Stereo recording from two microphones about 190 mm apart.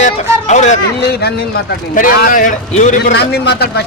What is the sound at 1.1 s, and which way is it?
A man's voice, 55° left (ahead or behind).